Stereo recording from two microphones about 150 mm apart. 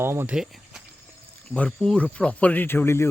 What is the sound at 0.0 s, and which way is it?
Speech, 15° right (ahead or behind).